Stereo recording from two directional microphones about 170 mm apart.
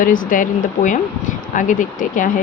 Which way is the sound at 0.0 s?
55° left (ahead or behind).